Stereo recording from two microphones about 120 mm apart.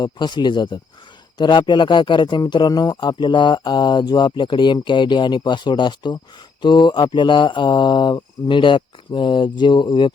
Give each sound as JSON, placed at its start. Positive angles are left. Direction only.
{"t": 0.0, "sound": "a man's voice", "side_deg": 40}